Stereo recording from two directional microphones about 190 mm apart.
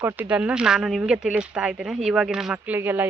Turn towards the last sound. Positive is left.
turn(degrees=-10)  # may be behind; listen again after turning